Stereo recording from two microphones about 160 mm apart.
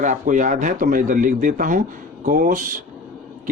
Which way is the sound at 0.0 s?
50° right (ahead or behind).